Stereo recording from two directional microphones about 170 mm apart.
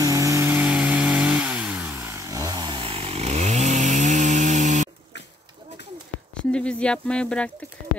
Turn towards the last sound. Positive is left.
turn(degrees=5)  # may be behind; listen again after turning